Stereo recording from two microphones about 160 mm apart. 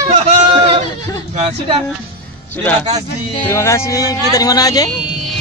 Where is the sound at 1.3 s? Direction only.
30° right (ahead or behind).